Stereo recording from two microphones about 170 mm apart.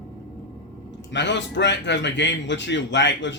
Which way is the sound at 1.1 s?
90° left.